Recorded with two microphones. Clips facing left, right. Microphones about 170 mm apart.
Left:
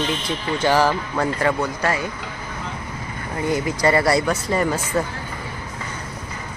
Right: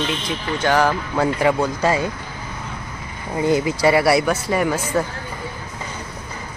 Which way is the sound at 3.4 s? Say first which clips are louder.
Right 4 dB; 20° right (ahead or behind).